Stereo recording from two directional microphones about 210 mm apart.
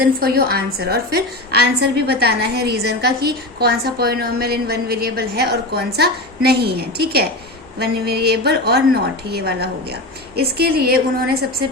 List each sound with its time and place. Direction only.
0.0 s a woman's voice: 45° right (ahead or behind)